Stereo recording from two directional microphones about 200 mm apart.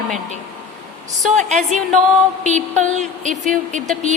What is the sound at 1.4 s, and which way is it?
Speech, 35° right (ahead or behind).